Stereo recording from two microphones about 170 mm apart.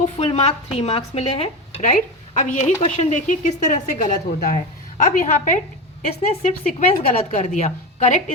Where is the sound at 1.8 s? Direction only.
45° left (ahead or behind).